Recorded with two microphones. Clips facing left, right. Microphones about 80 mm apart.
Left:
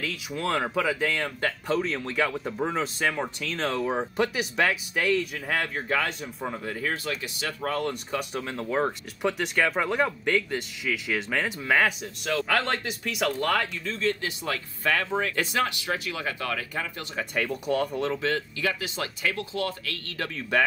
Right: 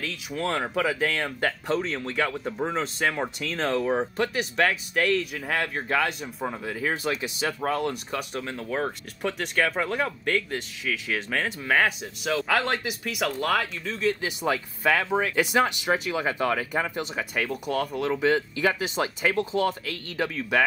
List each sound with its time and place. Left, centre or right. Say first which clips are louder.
0.0 s speech: even; centre
7.7 s speech: right 1 dB; centre; by 17.2 s right
17.2 s speech: left 3 dB; centre
18.2 s speech: right 5 dB; right
20.3 s speech: even; centre